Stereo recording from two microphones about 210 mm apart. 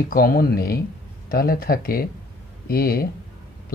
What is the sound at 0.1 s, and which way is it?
Speech, 45° left (ahead or behind).